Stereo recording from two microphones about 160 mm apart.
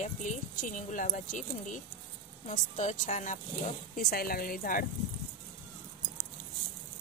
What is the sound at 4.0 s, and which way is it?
Speech, 70° left (ahead or behind).